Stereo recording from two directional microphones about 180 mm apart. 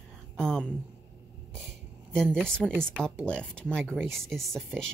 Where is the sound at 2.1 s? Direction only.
5° left (ahead or behind).